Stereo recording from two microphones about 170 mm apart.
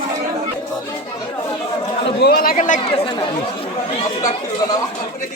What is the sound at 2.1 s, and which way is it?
Speech, 70° left (ahead or behind).